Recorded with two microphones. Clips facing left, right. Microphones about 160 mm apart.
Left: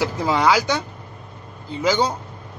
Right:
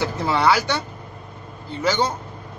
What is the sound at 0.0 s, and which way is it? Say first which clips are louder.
Speech: left 1 dB; 10° left (ahead or behind).